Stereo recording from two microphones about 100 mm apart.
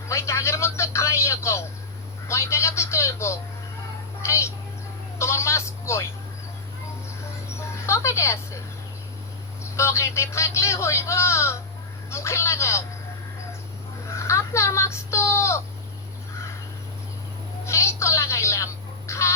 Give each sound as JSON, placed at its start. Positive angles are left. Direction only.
{"t": 0.1, "sound": "a sound", "side_deg": 30}
{"t": 2.2, "sound": "speech", "side_deg": 30}
{"t": 7.5, "sound": "speech", "side_deg": 30}
{"t": 9.7, "sound": "speech", "side_deg": 30}
{"t": 14.1, "sound": "speech", "side_deg": 30}
{"t": 17.7, "sound": "telephone", "side_deg": 30}